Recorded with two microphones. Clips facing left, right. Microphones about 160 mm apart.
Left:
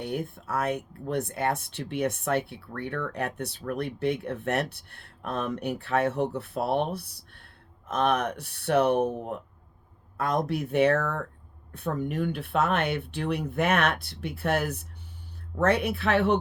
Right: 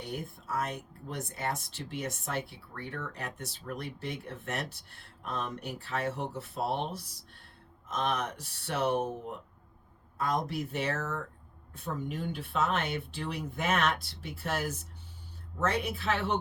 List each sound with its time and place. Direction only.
0.0 s speech: 60° left (ahead or behind)